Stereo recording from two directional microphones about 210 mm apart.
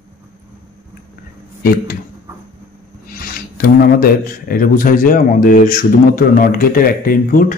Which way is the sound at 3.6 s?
45° left (ahead or behind).